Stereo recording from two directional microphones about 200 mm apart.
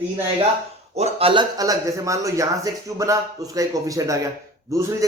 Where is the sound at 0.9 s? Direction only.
30° right (ahead or behind).